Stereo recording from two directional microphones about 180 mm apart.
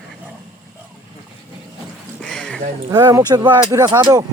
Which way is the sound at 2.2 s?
5° left (ahead or behind).